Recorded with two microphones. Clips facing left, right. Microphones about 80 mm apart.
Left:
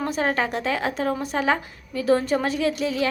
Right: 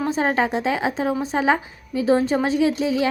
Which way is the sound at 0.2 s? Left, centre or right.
Centre.